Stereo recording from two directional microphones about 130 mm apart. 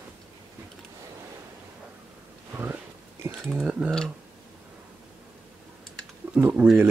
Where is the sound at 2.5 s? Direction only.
15° right (ahead or behind).